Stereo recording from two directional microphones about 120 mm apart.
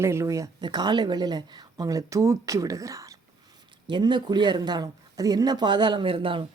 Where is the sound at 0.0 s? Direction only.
20° right (ahead or behind).